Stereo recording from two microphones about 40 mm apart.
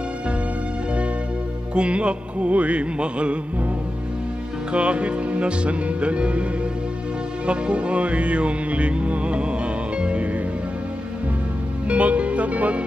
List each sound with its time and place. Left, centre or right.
1.8 s music: right
4.7 s music: right
7.4 s music: right
11.9 s music: right